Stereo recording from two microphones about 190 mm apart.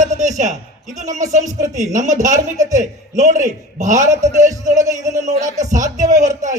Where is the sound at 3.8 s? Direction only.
40° right (ahead or behind).